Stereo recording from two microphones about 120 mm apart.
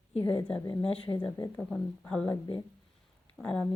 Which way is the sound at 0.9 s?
45° left (ahead or behind).